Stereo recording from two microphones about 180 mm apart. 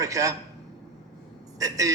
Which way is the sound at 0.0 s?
20° right (ahead or behind).